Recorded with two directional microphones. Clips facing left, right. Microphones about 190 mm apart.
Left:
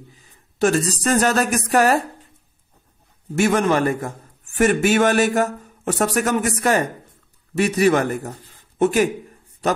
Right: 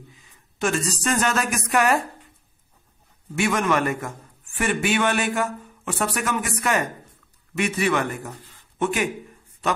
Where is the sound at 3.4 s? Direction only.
35° left (ahead or behind).